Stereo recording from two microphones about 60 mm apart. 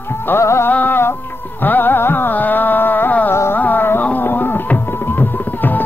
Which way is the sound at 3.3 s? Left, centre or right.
Left.